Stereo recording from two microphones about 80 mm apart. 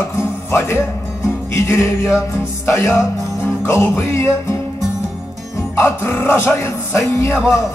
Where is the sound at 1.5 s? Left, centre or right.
Left.